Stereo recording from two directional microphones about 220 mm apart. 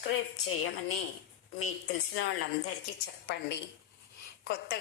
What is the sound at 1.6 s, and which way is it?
Speech, 55° left (ahead or behind).